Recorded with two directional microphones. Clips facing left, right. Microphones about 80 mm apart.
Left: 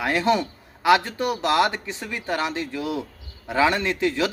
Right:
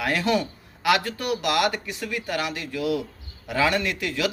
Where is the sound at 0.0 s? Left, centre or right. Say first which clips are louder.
Left 2 dB; left.